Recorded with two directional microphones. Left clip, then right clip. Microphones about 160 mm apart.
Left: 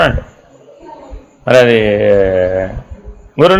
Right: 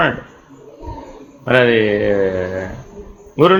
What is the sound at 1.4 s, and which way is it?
A man's voice, 60° left (ahead or behind).